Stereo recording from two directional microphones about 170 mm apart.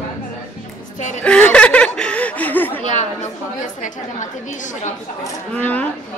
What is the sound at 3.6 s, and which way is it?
Speech, 45° left (ahead or behind).